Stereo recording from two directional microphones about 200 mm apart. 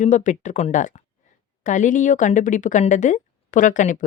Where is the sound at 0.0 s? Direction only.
40° left (ahead or behind).